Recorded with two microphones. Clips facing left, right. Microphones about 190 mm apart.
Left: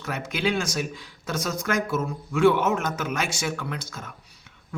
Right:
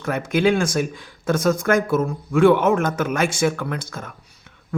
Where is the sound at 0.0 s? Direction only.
50° right (ahead or behind).